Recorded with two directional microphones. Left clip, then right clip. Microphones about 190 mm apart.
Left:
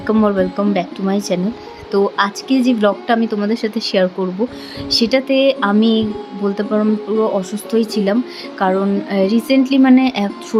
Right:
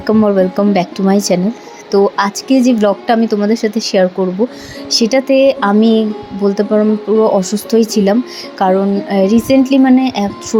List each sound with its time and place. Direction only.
0.1 s speech: 10° right (ahead or behind)
0.5 s speech: 20° right (ahead or behind)